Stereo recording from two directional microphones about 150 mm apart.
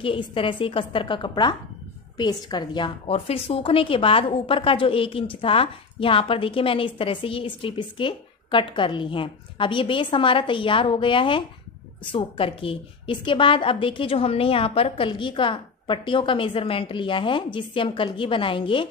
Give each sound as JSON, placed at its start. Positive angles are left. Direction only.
{"t": 0.0, "sound": "a woman's voice", "side_deg": 35}